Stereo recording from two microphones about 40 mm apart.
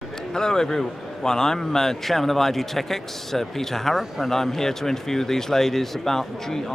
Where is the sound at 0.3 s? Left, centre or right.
Centre.